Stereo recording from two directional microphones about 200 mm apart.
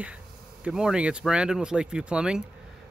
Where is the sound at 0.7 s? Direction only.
5° right (ahead or behind).